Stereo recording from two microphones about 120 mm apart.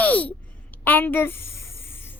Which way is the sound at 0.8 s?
15° left (ahead or behind).